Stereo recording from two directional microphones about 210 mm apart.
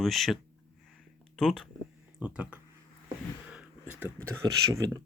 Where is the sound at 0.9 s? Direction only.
Centre (ahead or behind).